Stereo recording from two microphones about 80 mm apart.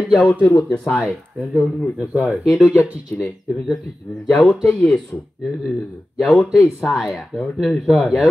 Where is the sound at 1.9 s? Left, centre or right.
Centre.